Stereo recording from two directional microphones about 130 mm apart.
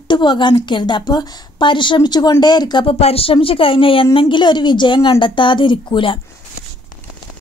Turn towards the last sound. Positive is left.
turn(degrees=40)  # may be behind; listen again after turning